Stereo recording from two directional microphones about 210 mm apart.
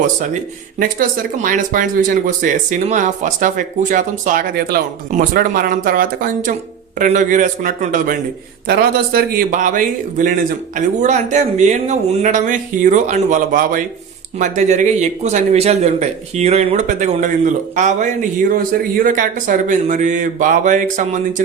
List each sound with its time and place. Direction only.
0.8 s speech: 40° right (ahead or behind)